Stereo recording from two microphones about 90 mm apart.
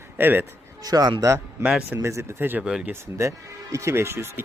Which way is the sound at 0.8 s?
45° right (ahead or behind).